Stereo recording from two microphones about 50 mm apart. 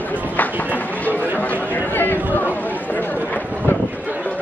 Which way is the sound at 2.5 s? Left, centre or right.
Left.